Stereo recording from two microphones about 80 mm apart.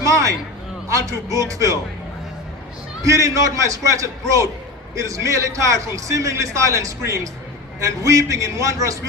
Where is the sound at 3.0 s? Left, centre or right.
Right.